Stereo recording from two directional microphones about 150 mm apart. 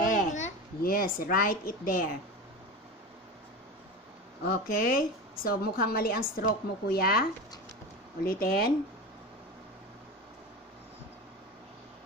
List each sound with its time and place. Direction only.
0.0 s a child's voice: 55° left (ahead or behind); by 2.0 s 75° left (ahead or behind)
4.5 s a woman's voice: 75° left (ahead or behind)